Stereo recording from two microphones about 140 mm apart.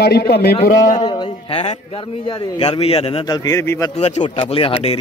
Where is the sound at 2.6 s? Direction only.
45° left (ahead or behind).